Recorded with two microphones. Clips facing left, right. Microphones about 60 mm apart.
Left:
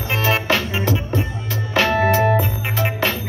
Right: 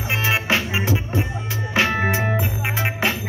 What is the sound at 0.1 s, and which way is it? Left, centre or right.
Music, centre.